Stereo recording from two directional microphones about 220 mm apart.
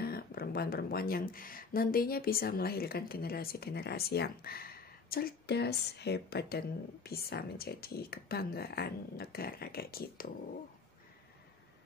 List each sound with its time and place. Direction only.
0.0 s speech: 45° left (ahead or behind)